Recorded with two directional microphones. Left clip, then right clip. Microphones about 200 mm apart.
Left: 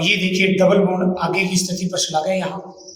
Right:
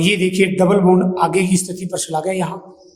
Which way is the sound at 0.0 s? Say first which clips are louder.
Right 1 dB; 45° right (ahead or behind).